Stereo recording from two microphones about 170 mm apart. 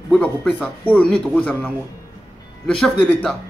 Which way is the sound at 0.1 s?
5° left (ahead or behind).